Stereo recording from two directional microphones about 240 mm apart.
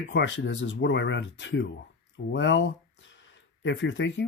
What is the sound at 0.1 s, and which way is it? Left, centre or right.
Speech, left.